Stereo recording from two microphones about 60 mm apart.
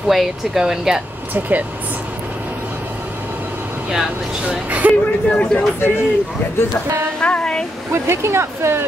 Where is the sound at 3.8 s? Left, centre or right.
Centre.